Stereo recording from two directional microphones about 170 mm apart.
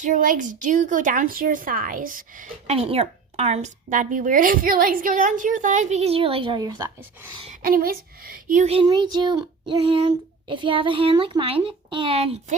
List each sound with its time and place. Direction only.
0.0 s speech: 50° right (ahead or behind); by 7.4 s 25° right (ahead or behind)
7.6 s speech: 60° right (ahead or behind)
8.7 s speech: 25° right (ahead or behind)